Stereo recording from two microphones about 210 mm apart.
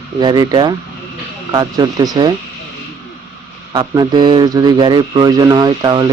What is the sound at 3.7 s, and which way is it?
A man's voice, 20° right (ahead or behind).